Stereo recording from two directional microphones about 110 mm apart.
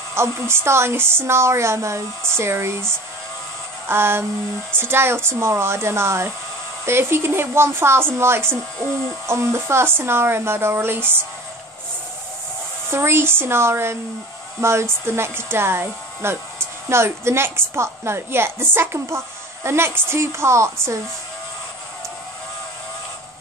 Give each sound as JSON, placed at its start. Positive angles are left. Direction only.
{"t": 0.1, "sound": "a woman's voice", "side_deg": -25}
{"t": 3.9, "sound": "a woman's voice", "side_deg": -20}
{"t": 12.9, "sound": "a woman's voice", "side_deg": -20}